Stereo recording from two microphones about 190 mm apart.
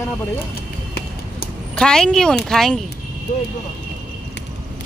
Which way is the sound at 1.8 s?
5° left (ahead or behind).